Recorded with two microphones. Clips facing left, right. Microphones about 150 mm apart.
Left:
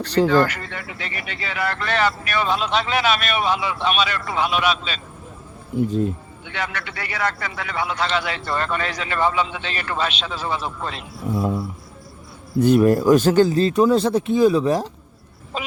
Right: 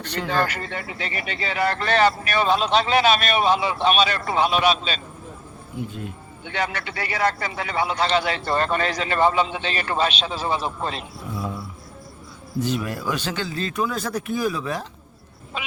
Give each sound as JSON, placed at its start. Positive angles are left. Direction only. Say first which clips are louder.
{"t": 0.0, "sound": "speech", "louder": "left 11 dB", "side_deg": 35}
{"t": 0.3, "sound": "speech", "louder": "left 6 dB", "side_deg": -25}
{"t": 6.5, "sound": "a man's voice", "louder": "right 2 dB", "side_deg": -35}
{"t": 12.5, "sound": "speech", "louder": "left 11 dB", "side_deg": 55}